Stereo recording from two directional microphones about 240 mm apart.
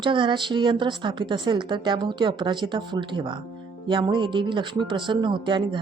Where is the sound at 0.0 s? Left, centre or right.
Centre.